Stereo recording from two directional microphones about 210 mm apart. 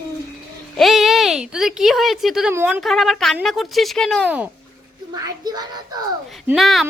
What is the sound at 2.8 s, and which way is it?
A woman's voice, centre (ahead or behind).